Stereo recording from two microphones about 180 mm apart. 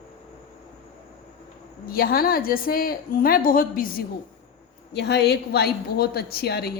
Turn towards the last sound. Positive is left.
turn(degrees=65)  # may be behind; listen again after turning